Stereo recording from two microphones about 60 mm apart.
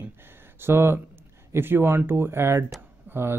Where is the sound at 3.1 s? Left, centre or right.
Right.